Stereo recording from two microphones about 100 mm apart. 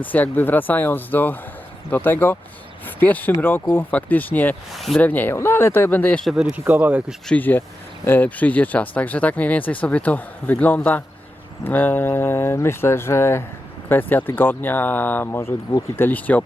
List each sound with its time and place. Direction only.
0.0 s speech: 15° left (ahead or behind)
4.7 s speech: centre (ahead or behind)
4.9 s speech: 15° left (ahead or behind)
6.2 s speech: 10° right (ahead or behind)
7.3 s speech: 15° left (ahead or behind)